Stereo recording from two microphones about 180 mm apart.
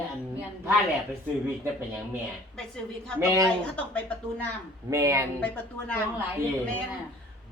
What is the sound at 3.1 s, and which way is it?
Speech, 20° right (ahead or behind).